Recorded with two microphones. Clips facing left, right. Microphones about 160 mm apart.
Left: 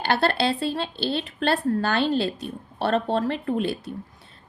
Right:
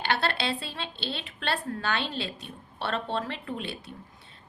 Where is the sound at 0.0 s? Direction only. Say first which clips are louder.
Left 6 dB; 40° left (ahead or behind).